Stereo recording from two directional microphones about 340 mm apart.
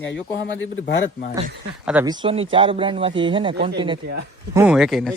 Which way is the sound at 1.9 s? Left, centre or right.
Centre.